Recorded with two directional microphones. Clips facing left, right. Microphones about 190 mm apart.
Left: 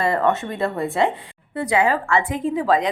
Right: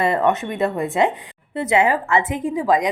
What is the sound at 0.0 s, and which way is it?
A woman's voice, 20° right (ahead or behind).